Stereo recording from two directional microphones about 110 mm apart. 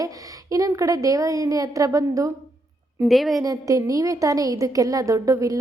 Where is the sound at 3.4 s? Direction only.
30° right (ahead or behind).